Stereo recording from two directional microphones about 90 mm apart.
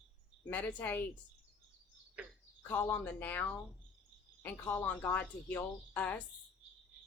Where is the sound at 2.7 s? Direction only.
25° left (ahead or behind).